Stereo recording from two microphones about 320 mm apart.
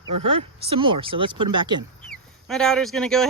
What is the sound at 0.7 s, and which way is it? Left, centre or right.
Speech, centre.